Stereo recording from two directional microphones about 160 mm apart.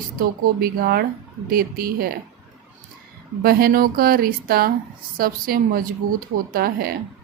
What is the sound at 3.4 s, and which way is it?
A woman's voice, 70° right (ahead or behind).